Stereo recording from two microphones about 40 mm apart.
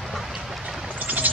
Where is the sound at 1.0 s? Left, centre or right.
Right.